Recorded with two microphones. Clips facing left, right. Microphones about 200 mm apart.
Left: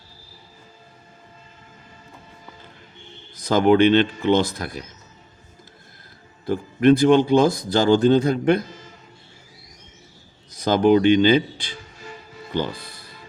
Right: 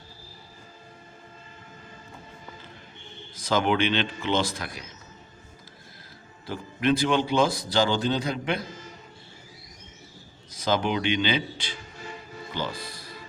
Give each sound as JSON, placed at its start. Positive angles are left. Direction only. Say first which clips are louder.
{"t": 3.5, "sound": "speech", "louder": "left 9 dB", "side_deg": 45}
{"t": 6.4, "sound": "speech", "louder": "left 9 dB", "side_deg": 50}
{"t": 10.7, "sound": "speech", "louder": "left 10 dB", "side_deg": 45}